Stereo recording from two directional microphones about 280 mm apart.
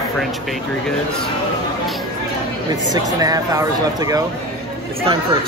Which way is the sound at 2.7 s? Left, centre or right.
Centre.